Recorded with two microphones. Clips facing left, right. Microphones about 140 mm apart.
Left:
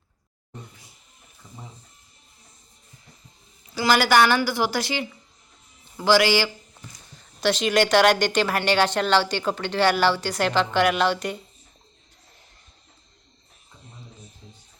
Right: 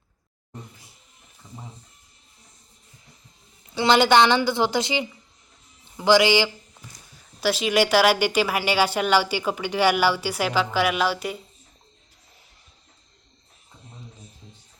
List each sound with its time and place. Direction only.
3.8 s a woman's voice: 25° right (ahead or behind)
7.2 s speech: 5° right (ahead or behind)